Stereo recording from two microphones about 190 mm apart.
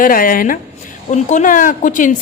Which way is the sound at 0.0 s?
45° left (ahead or behind).